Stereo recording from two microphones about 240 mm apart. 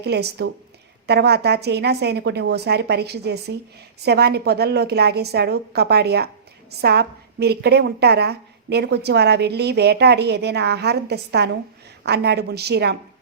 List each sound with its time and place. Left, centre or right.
0.0 s a woman's voice: right